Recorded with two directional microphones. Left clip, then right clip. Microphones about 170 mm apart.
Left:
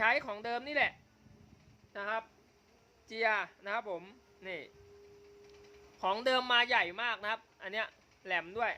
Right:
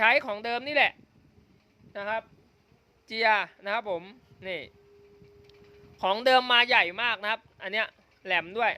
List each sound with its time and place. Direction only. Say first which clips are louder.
0.0 s a man's voice: right 8 dB; 50° right (ahead or behind)
3.1 s speech: right 8 dB; 55° right (ahead or behind)
6.0 s a man's voice: right 9 dB; 50° right (ahead or behind)